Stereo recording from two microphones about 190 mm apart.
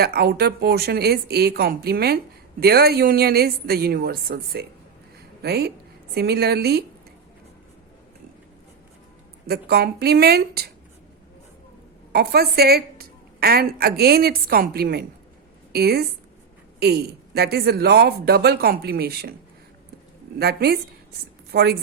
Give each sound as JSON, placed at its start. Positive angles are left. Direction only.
{"t": 0.0, "sound": "a woman's voice", "side_deg": -55}
{"t": 9.5, "sound": "a woman's voice", "side_deg": -55}
{"t": 12.1, "sound": "a woman's voice", "side_deg": -55}
{"t": 20.4, "sound": "a woman's voice", "side_deg": -55}